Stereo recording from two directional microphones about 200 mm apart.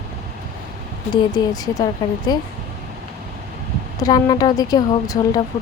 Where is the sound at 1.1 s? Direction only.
20° left (ahead or behind).